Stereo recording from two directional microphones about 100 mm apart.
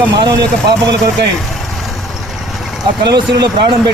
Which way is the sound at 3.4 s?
45° right (ahead or behind).